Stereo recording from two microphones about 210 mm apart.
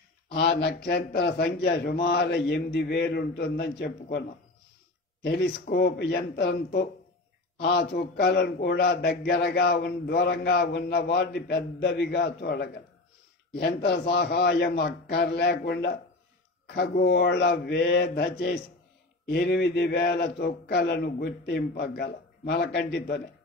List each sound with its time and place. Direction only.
0.3 s a man's voice: 50° left (ahead or behind)
5.2 s a man's voice: 50° left (ahead or behind)